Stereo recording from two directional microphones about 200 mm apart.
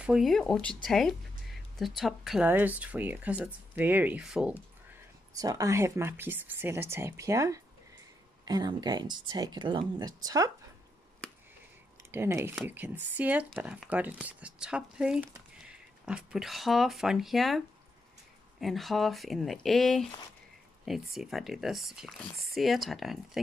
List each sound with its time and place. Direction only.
0.0 s speech: centre (ahead or behind)
5.3 s speech: 20° right (ahead or behind)
11.2 s a sound: 5° left (ahead or behind)
12.1 s speech: 15° right (ahead or behind)